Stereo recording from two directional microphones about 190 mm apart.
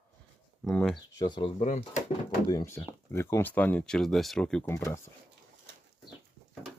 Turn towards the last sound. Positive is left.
turn(degrees=15)  # may be behind; listen again after turning